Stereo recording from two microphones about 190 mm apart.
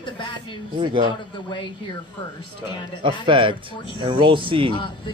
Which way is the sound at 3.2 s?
25° right (ahead or behind).